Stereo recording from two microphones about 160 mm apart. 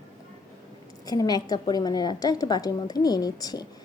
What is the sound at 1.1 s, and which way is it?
A woman's voice, 25° left (ahead or behind).